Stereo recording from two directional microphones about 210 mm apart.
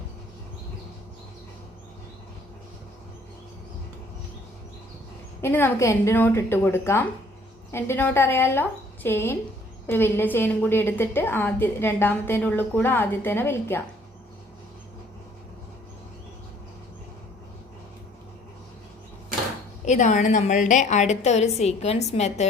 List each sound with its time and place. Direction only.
5.4 s a woman's voice: 10° left (ahead or behind)
19.8 s a woman's voice: 35° left (ahead or behind)